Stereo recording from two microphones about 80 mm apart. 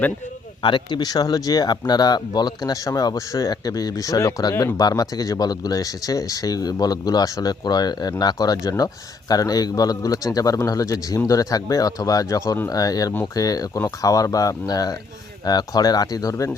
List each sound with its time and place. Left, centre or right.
0.6 s speech: left